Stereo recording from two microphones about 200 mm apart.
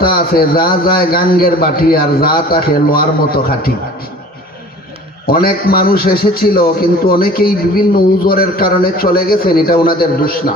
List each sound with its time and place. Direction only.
0.0 s a man's voice: 50° left (ahead or behind)
5.2 s a man's voice: 50° left (ahead or behind)